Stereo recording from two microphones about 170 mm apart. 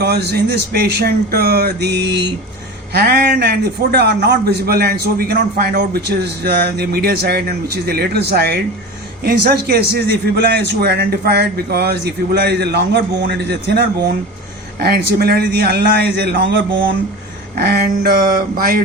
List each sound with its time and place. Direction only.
0.0 s a man's voice: 75° right (ahead or behind)
2.9 s a man's voice: 65° right (ahead or behind); by 13.8 s 85° right
14.8 s a man's voice: 70° right (ahead or behind); by 16.6 s 90° right
17.5 s a sound: 65° right (ahead or behind)